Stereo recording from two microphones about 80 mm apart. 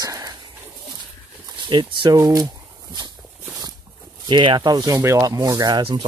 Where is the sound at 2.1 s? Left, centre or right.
Right.